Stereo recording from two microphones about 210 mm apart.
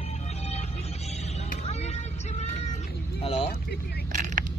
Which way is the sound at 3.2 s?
25° left (ahead or behind).